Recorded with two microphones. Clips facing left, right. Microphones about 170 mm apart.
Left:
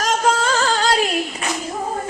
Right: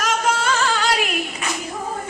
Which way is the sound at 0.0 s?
35° left (ahead or behind).